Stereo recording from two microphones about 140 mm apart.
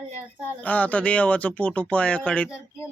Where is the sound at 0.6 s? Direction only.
10° left (ahead or behind).